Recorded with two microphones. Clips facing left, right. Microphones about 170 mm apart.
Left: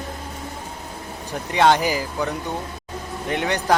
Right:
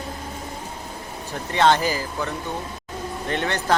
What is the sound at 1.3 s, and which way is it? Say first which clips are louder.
Speech: left 1 dB; 10° left (ahead or behind).